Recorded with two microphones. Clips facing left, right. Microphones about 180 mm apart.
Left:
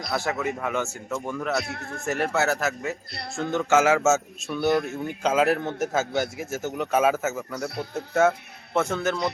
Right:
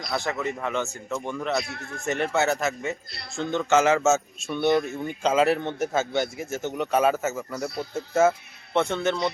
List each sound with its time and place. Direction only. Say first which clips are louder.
0.1 s a man's voice: left 1 dB; 5° left (ahead or behind)
1.6 s a man's voice: left 2 dB; 40° left (ahead or behind)
2.0 s a man's voice: even; 5° left (ahead or behind)